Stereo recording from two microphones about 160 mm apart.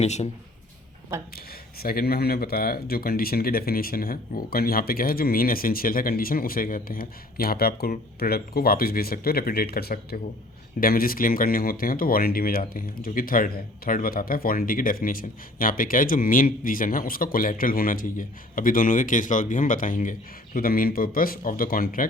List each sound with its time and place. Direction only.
0.0 s speech: 45° left (ahead or behind)
1.8 s speech: 70° left (ahead or behind)